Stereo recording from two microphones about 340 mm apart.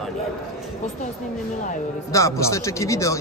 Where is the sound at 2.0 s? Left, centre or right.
Centre.